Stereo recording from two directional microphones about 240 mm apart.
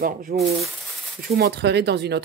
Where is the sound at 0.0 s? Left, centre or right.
Right.